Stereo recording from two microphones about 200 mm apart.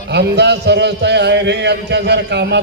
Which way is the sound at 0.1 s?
55° right (ahead or behind).